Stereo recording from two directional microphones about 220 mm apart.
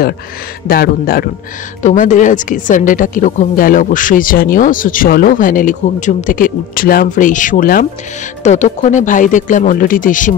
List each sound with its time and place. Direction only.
0.7 s speech: 45° left (ahead or behind)